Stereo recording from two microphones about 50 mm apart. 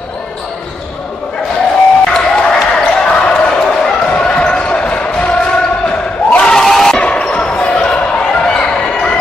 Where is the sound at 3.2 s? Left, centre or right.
Centre.